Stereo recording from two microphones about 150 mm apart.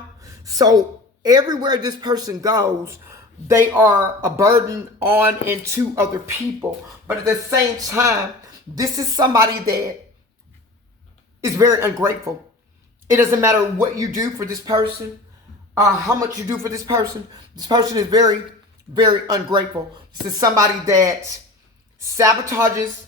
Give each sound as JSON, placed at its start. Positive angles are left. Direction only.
{"t": 0.2, "sound": "speech", "side_deg": -25}
{"t": 11.3, "sound": "speech", "side_deg": -20}